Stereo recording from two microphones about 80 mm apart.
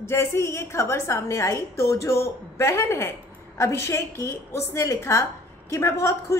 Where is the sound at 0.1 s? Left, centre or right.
Left.